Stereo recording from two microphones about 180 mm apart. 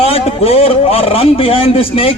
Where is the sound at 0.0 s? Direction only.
35° left (ahead or behind).